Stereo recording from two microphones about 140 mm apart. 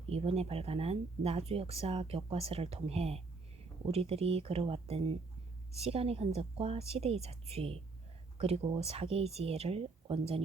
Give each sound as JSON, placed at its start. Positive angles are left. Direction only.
{"t": 0.0, "sound": "speech", "side_deg": -45}